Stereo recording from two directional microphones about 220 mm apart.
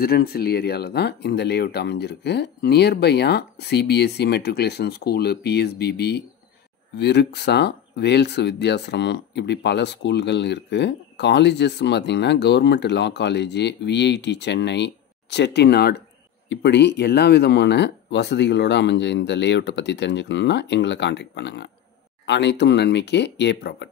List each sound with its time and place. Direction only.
0.0 s speech: 45° left (ahead or behind)